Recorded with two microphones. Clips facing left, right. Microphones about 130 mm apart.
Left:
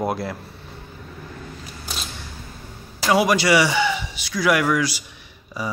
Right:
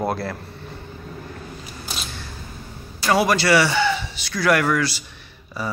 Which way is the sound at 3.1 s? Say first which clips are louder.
Even; 15° left (ahead or behind).